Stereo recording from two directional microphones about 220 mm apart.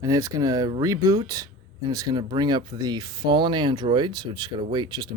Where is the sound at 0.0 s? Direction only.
15° right (ahead or behind).